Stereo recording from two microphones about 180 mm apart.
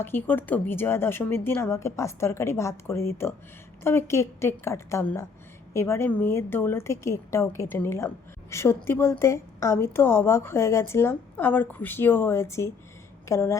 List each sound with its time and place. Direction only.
0.0 s a woman's voice: 10° left (ahead or behind)